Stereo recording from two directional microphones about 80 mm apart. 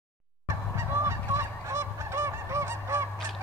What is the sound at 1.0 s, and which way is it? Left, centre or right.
Goose, right.